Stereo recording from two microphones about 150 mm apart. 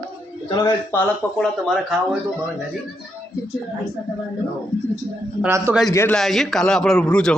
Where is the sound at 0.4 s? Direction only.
20° left (ahead or behind).